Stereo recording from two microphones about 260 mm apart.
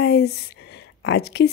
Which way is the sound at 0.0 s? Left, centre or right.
Left.